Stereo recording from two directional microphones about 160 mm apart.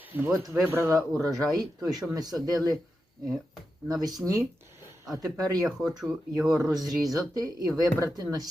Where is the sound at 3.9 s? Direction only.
25° right (ahead or behind).